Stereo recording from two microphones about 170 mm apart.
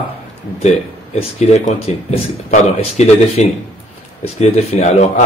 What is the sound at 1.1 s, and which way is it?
A man's voice, 40° left (ahead or behind).